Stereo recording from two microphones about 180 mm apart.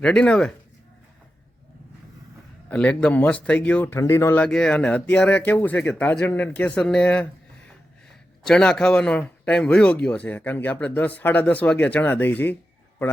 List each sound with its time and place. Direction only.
0.0 s speech: 5° left (ahead or behind)
2.6 s speech: 5° left (ahead or behind)
8.4 s speech: 5° left (ahead or behind)